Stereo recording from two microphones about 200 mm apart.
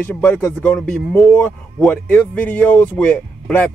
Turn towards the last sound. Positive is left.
turn(degrees=5)  # may be behind; listen again after turning